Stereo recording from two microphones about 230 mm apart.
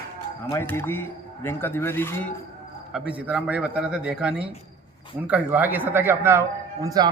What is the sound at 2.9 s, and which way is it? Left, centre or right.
A man's voice, centre.